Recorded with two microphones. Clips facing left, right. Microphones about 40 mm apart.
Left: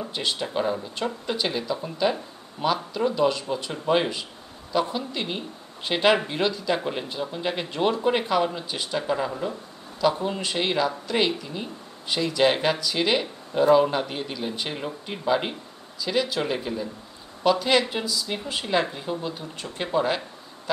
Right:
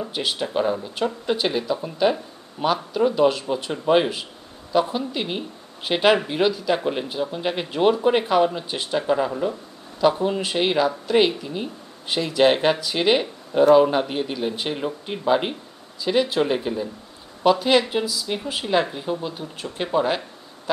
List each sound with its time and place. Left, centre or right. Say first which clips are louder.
0.0 s speech: right 2 dB; centre